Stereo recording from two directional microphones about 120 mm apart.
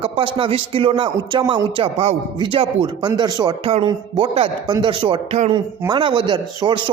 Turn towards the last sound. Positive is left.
turn(degrees=-40)  # may be behind; listen again after turning